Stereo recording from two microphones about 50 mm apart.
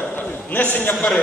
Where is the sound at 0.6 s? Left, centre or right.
Left.